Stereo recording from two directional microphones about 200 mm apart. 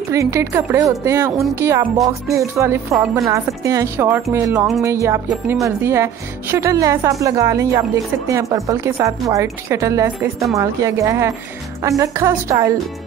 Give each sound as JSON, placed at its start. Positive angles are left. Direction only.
{"t": 0.1, "sound": "speech", "side_deg": -15}